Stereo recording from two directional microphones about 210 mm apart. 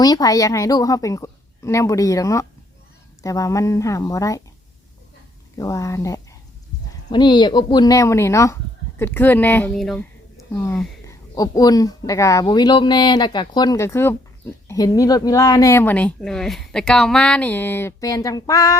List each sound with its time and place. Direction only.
0.0 s speech: 15° left (ahead or behind)
5.5 s speech: 15° left (ahead or behind)
10.5 s speech: 10° left (ahead or behind)